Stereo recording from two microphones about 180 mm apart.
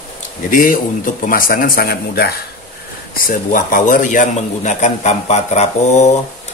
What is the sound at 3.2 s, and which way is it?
A man's voice, 45° left (ahead or behind).